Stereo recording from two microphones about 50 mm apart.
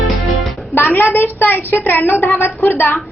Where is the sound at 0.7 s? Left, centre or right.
Left.